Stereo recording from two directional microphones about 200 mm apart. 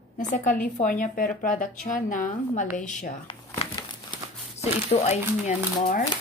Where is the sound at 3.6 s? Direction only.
25° left (ahead or behind).